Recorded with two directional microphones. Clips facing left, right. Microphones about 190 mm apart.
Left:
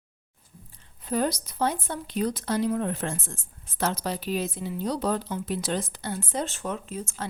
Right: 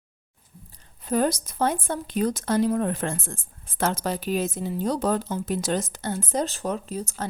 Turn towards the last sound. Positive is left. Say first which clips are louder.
# right 3 dB
turn(degrees=-35)  # may be behind; listen again after turning